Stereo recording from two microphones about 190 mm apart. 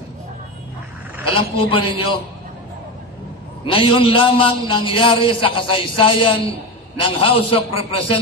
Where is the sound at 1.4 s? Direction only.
30° left (ahead or behind).